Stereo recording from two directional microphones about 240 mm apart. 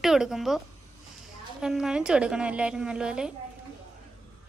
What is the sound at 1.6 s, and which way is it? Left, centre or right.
A woman's voice, centre.